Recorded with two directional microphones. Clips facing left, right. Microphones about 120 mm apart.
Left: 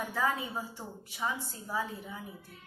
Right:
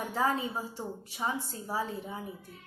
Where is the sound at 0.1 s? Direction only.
30° right (ahead or behind).